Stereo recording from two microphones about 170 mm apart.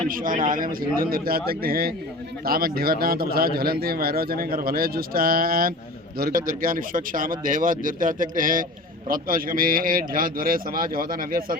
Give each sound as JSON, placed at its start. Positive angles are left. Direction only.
{"t": 0.1, "sound": "a man's voice", "side_deg": -55}